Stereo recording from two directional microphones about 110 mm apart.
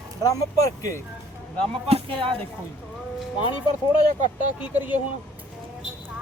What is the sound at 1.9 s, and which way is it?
Speech, 55° right (ahead or behind).